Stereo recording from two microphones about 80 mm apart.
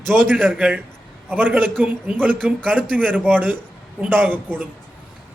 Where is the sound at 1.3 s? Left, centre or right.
Right.